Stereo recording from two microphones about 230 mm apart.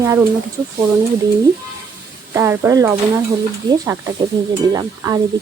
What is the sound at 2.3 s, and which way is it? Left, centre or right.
Speech, centre.